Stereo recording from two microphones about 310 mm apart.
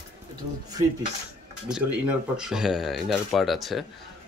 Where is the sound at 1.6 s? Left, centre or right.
Centre.